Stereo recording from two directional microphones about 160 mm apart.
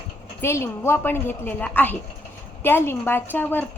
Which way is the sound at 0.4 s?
15° left (ahead or behind).